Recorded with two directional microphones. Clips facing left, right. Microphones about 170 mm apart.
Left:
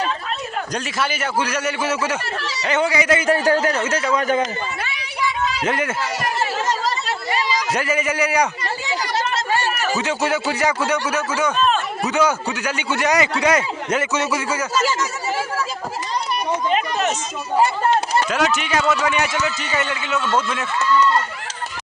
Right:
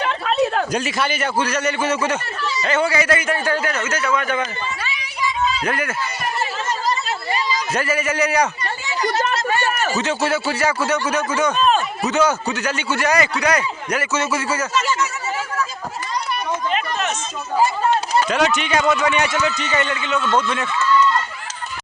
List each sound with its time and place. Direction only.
0.0 s a sound: 70° right (ahead or behind)
0.7 s a man's voice: centre (ahead or behind)
2.4 s speech: 80° left
2.6 s a man's voice: 15° left (ahead or behind)
3.2 s a man's voice: 35° left (ahead or behind)
4.8 s a sound: 60° left (ahead or behind)
5.6 s a man's voice: 20° left (ahead or behind)
6.0 s chatter: 85° left
7.7 s a man's voice: 15° left (ahead or behind)
9.3 s chatter: 30° left (ahead or behind)
9.9 s a man's voice: 10° left (ahead or behind)
18.3 s a man's voice: 5° left (ahead or behind)